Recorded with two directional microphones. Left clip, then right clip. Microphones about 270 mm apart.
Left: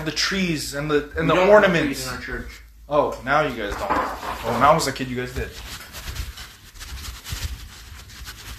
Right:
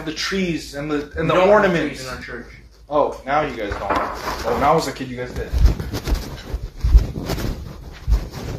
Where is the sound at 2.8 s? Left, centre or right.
Left.